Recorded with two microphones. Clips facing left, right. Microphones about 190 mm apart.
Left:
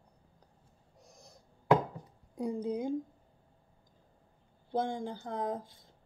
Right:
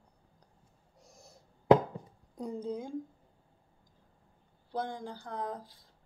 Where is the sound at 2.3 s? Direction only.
10° left (ahead or behind).